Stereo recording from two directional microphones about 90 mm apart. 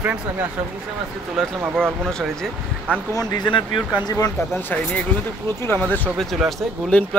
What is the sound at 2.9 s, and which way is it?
Speech, 15° left (ahead or behind).